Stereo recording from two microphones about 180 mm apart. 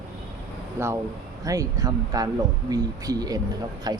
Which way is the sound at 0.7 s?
15° right (ahead or behind).